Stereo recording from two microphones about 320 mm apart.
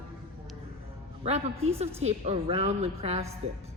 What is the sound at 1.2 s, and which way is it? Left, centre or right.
Speech, centre.